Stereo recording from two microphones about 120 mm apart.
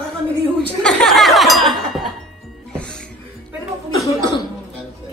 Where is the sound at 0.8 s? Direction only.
5° left (ahead or behind).